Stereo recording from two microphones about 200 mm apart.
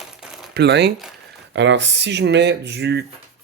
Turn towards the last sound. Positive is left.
turn(degrees=-55)  # may be behind; listen again after turning